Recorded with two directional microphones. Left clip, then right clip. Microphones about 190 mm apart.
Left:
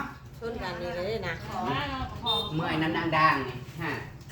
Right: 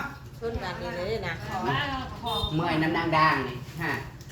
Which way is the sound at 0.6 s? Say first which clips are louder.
Even; 25° left (ahead or behind).